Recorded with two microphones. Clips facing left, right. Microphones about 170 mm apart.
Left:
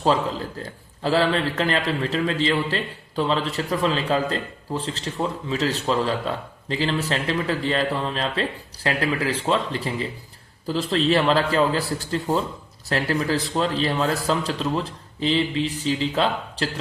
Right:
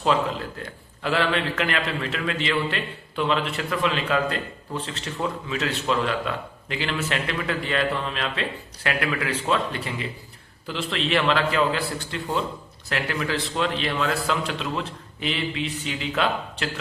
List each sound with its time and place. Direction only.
0.0 s a man's voice: 35° left (ahead or behind)